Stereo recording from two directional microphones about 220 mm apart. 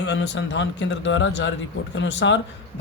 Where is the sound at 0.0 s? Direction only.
55° left (ahead or behind).